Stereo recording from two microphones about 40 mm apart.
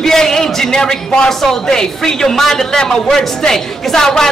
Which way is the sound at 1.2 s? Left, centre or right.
Centre.